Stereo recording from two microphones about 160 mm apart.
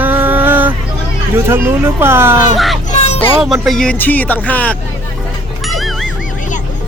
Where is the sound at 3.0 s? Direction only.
45° left (ahead or behind).